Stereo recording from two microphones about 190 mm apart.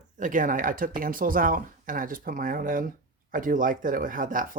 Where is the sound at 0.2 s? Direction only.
45° right (ahead or behind).